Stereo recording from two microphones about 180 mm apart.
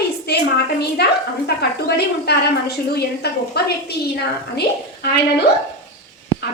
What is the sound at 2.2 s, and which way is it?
A woman's voice, 65° left (ahead or behind).